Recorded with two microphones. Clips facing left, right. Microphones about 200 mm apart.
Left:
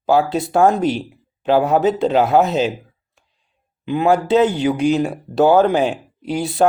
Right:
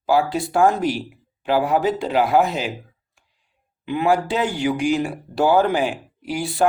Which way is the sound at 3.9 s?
20° left (ahead or behind).